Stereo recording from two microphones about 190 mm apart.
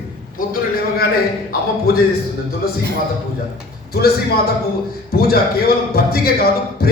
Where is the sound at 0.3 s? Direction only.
50° left (ahead or behind).